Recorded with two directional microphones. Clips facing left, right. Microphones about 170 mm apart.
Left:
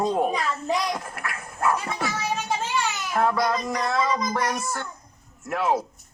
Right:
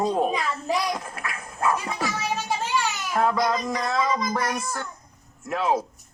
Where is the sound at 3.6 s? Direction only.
15° left (ahead or behind).